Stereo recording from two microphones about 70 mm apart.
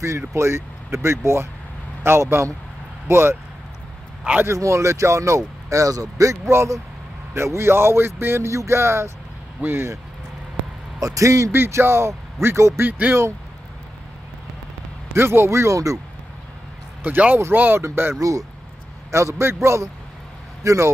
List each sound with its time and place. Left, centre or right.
0.3 s speech: right
4.2 s a man's voice: right
4.5 s speech: right
11.0 s speech: right
11.5 s speech: right
12.8 s speech: right
15.1 s speech: right
17.0 s speech: right
19.1 s speech: right